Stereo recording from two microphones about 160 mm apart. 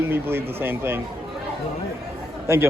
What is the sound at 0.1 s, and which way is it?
Speech, 15° right (ahead or behind).